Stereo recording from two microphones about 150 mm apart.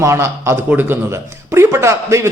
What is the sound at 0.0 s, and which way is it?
A man's voice, 20° right (ahead or behind).